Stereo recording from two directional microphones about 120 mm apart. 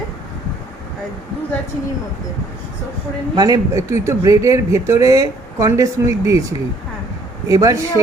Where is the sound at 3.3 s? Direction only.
30° right (ahead or behind).